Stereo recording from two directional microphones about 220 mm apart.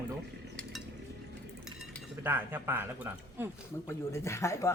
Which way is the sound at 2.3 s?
10° right (ahead or behind).